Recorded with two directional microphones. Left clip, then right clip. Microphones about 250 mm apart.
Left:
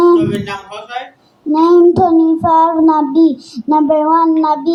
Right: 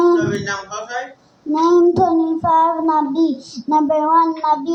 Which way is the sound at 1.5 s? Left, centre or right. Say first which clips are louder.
Left 5 dB; left.